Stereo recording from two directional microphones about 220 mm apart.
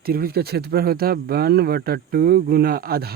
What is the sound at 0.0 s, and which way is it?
Speech, 45° right (ahead or behind).